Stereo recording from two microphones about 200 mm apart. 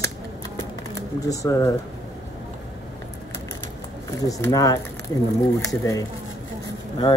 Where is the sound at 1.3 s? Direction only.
15° left (ahead or behind).